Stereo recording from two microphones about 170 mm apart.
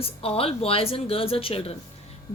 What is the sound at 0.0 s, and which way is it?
A woman's voice, 35° left (ahead or behind).